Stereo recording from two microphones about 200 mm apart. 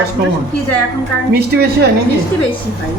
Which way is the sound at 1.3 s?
55° right (ahead or behind).